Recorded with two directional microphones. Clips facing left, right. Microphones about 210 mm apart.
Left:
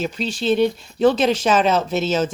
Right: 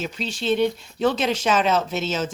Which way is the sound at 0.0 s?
35° left (ahead or behind).